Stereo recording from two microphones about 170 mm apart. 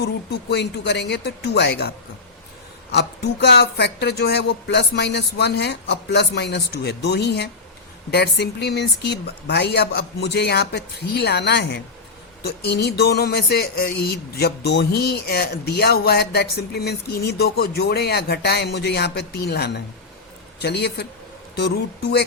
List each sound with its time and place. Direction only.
0.0 s speech: 80° left
2.9 s speech: 75° left (ahead or behind)
12.5 s speech: 75° left (ahead or behind)